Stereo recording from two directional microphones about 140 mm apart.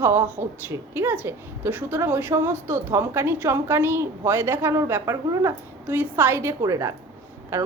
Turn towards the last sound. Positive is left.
turn(degrees=-15)  # may be behind; listen again after turning